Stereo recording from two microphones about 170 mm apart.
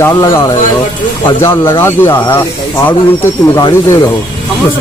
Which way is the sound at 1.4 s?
15° left (ahead or behind).